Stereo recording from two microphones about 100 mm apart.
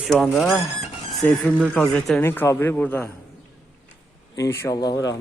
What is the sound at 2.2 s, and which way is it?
Speech, 25° left (ahead or behind).